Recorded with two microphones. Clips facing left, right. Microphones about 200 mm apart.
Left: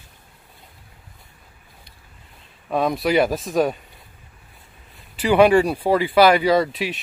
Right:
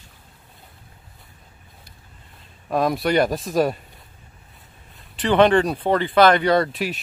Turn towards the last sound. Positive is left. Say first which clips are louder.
# left 1 dB
turn(degrees=0)  # may be behind; listen again after turning